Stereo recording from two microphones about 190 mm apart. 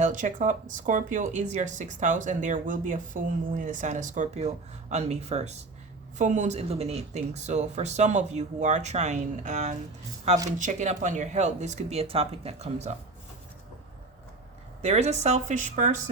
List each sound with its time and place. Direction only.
0.0 s speech: 40° right (ahead or behind)
14.8 s speech: 35° right (ahead or behind)